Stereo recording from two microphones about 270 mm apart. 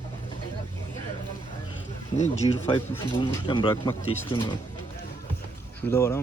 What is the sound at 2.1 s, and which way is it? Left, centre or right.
A man's voice, left.